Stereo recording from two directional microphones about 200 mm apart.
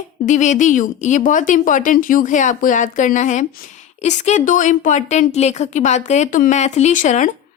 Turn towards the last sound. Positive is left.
turn(degrees=40)  # may be behind; listen again after turning